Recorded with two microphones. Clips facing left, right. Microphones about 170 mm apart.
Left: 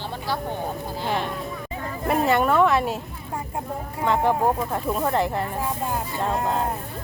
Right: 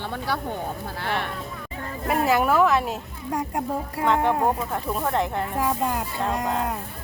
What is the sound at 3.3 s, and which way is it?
Speech, 80° right.